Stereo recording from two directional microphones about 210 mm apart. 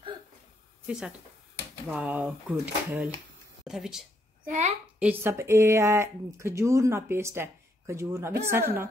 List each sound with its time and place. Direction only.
0.8 s speech: 5° right (ahead or behind)
4.5 s a child's voice: 35° right (ahead or behind)
4.9 s speech: 10° right (ahead or behind)